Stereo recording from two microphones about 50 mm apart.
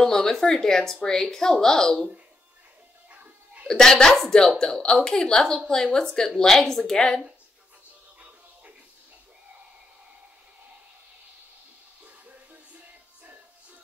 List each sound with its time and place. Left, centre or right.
0.0 s a woman's voice: centre
3.1 s music: right
3.6 s a woman's voice: centre